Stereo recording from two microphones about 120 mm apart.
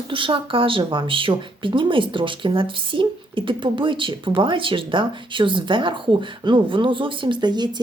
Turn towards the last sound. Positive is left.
turn(degrees=-35)  # may be behind; listen again after turning